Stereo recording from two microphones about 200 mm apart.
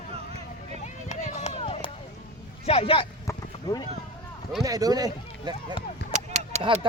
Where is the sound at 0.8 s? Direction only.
35° left (ahead or behind).